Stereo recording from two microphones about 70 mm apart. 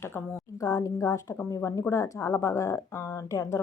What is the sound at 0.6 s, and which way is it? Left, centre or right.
A woman's voice, left.